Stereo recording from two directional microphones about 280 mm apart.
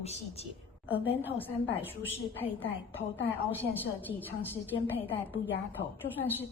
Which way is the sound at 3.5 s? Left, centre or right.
Centre.